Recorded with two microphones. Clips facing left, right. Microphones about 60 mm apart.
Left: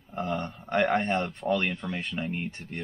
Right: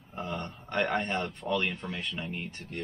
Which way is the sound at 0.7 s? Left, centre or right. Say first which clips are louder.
Left 5 dB; centre.